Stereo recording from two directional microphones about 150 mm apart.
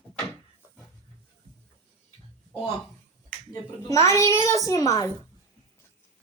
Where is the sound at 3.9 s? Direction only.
20° left (ahead or behind).